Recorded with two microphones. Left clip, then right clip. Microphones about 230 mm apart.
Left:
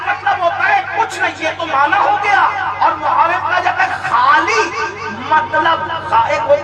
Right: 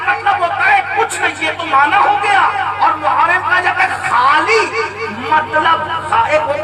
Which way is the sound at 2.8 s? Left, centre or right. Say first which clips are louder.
Even; right.